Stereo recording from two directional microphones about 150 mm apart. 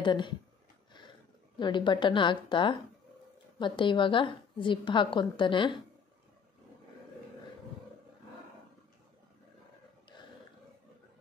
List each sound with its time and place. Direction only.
0.0 s speech: 30° left (ahead or behind)
1.6 s a woman's voice: 30° left (ahead or behind)